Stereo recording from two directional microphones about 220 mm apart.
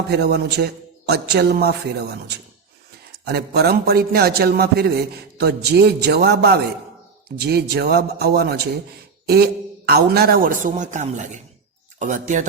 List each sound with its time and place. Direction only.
0.1 s a man's voice: 50° right (ahead or behind)
9.8 s speech: 45° right (ahead or behind)